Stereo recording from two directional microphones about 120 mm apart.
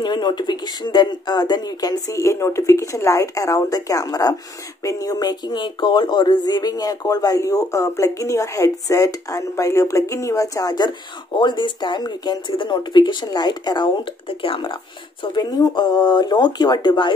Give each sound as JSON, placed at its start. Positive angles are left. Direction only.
{"t": 0.0, "sound": "speech", "side_deg": 40}